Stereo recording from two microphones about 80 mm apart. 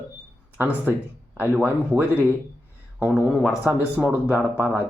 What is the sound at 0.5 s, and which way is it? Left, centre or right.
Speech, right.